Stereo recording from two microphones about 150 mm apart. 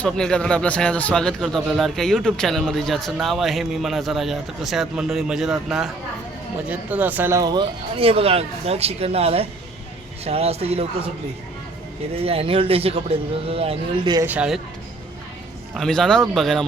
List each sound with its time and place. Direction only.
0.0 s a man's voice: 5° left (ahead or behind); by 11.1 s 40° right (ahead or behind)
12.2 s speech: 40° right (ahead or behind)
14.3 s speech: 5° right (ahead or behind)
15.7 s a man's voice: 5° left (ahead or behind)